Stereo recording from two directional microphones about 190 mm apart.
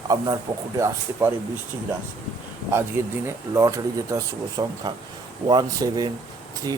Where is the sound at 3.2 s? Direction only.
15° right (ahead or behind).